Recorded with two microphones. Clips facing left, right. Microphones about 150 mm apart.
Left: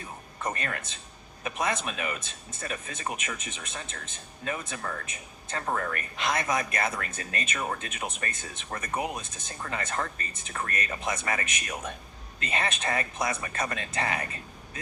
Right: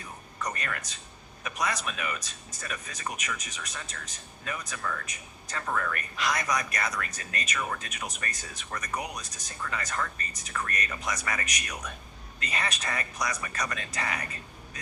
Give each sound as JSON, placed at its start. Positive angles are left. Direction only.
{"t": 0.3, "sound": "speech", "side_deg": 30}